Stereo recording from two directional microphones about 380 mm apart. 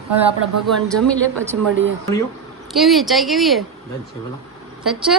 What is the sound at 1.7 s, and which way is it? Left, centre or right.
Speech, right.